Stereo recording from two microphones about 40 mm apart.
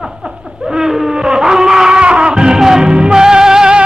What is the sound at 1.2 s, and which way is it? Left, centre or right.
Music, centre.